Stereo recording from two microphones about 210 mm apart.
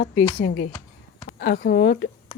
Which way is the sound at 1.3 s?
45° left (ahead or behind).